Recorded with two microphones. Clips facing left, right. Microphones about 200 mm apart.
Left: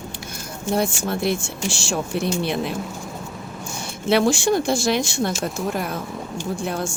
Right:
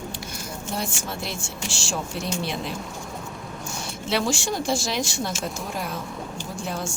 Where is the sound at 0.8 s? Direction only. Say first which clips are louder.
Left 10 dB; 55° left (ahead or behind).